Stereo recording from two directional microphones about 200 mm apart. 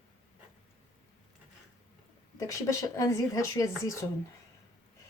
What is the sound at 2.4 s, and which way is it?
Speech, 15° left (ahead or behind).